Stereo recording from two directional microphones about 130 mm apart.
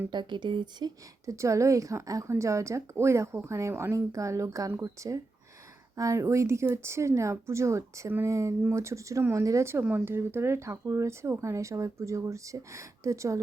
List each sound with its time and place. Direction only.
0.1 s speech: 35° right (ahead or behind)